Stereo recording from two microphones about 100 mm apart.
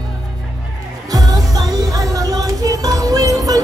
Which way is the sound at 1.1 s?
40° right (ahead or behind).